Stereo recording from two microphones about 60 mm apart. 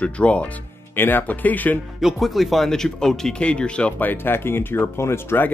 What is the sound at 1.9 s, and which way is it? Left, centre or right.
Speech, centre.